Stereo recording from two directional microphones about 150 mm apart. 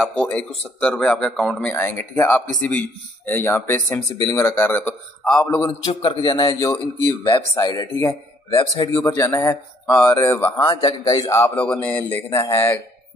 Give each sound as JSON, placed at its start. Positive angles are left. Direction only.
{"t": 0.1, "sound": "speech", "side_deg": 10}
{"t": 1.6, "sound": "speech", "side_deg": 10}
{"t": 6.0, "sound": "speech", "side_deg": 30}
{"t": 10.7, "sound": "a man's voice", "side_deg": 35}
{"t": 11.1, "sound": "speech", "side_deg": 20}
{"t": 12.3, "sound": "speech", "side_deg": 20}